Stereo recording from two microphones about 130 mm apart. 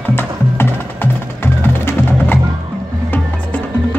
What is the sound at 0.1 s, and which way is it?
Music, 15° left (ahead or behind).